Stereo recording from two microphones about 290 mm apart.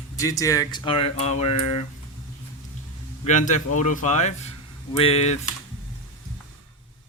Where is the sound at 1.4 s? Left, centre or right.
Left.